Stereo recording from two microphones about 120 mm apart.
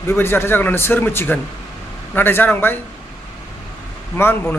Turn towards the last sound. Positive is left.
turn(degrees=20)  # may be behind; listen again after turning